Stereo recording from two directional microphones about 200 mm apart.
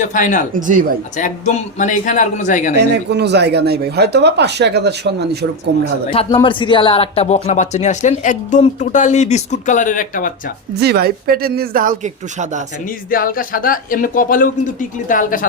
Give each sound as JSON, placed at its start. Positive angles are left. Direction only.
{"t": 0.0, "sound": "speech", "side_deg": 40}
{"t": 0.5, "sound": "speech", "side_deg": -40}
{"t": 1.1, "sound": "speech", "side_deg": 40}
{"t": 2.7, "sound": "speech", "side_deg": -55}
{"t": 6.1, "sound": "speech", "side_deg": 25}
{"t": 10.8, "sound": "speech", "side_deg": -55}
{"t": 13.1, "sound": "speech", "side_deg": 45}